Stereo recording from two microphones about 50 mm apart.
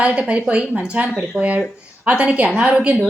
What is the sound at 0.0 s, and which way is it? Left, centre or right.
A woman's voice, right.